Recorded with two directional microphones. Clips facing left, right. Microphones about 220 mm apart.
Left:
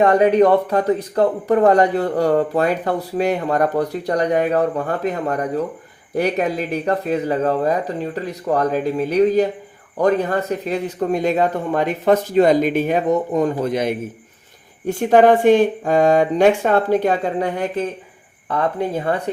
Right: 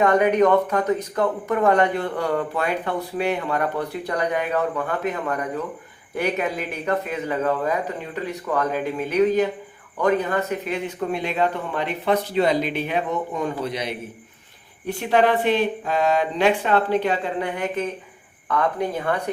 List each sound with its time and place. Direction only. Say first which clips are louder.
0.0 s a man's voice: left 4 dB; 30° left (ahead or behind)